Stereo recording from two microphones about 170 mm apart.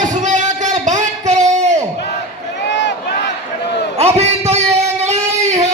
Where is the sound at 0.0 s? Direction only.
45° right (ahead or behind).